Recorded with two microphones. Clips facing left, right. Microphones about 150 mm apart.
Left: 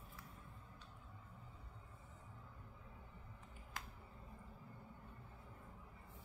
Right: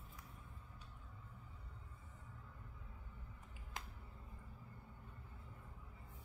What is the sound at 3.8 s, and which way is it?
Finger snapping, 20° right (ahead or behind).